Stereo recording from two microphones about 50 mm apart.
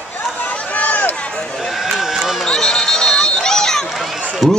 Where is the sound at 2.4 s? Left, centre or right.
Centre.